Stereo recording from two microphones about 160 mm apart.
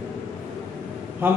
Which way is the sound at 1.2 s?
15° right (ahead or behind).